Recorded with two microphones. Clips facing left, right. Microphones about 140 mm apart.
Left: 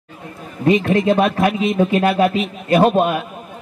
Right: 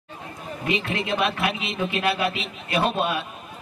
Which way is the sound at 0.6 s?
40° left (ahead or behind).